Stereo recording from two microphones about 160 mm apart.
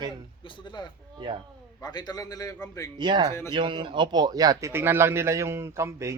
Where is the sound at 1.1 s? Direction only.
30° right (ahead or behind).